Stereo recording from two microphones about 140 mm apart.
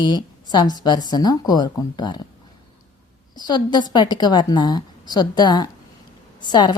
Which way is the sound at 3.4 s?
30° left (ahead or behind).